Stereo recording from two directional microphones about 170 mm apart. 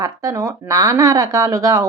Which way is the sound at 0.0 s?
20° right (ahead or behind).